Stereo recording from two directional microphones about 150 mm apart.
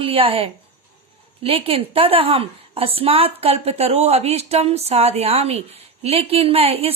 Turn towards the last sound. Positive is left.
turn(degrees=-40)  # may be behind; listen again after turning